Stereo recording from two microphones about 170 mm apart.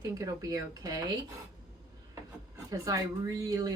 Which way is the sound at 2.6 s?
20° right (ahead or behind).